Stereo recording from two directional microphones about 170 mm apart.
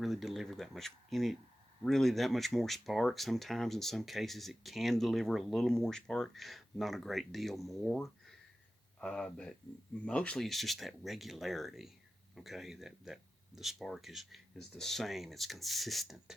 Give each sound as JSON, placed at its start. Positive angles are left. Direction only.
{"t": 0.0, "sound": "speech", "side_deg": 0}